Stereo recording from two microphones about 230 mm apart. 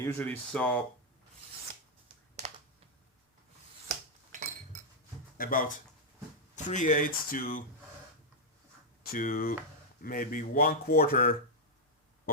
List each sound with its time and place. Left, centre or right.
0.0 s speech: centre
4.3 s cutlery: right
5.4 s speech: left
9.0 s speech: left